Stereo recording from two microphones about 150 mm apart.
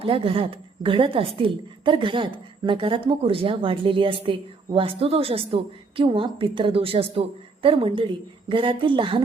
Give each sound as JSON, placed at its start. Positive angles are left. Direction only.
{"t": 0.0, "sound": "a woman's voice", "side_deg": -35}